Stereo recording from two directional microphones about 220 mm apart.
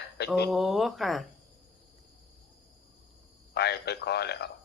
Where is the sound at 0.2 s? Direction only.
50° left (ahead or behind).